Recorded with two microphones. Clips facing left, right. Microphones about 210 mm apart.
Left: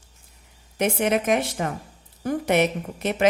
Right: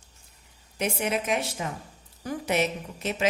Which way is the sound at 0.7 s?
55° left (ahead or behind).